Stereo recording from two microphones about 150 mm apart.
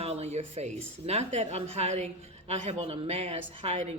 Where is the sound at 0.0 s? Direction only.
45° right (ahead or behind).